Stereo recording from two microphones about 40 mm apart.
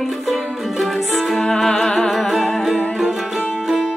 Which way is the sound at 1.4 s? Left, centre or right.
Centre.